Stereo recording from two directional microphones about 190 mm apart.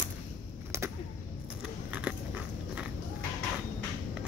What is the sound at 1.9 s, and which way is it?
Dog, 5° right (ahead or behind).